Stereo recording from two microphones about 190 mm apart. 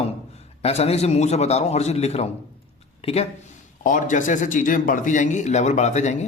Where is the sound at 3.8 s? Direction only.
45° left (ahead or behind).